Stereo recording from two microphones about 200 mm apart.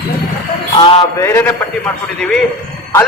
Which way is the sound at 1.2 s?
10° left (ahead or behind).